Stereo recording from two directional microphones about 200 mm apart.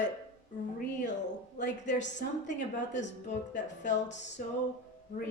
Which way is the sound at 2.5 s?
35° left (ahead or behind).